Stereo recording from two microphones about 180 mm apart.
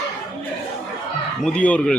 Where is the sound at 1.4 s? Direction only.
5° left (ahead or behind).